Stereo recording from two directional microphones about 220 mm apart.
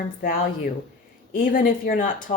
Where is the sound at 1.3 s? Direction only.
40° left (ahead or behind).